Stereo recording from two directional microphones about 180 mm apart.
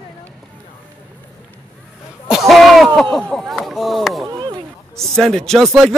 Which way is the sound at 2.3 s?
Centre (ahead or behind).